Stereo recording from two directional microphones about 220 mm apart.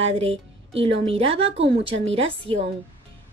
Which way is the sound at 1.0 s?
25° right (ahead or behind).